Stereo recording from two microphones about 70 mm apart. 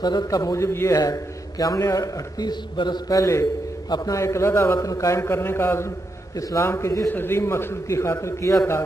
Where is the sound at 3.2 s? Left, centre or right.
Left.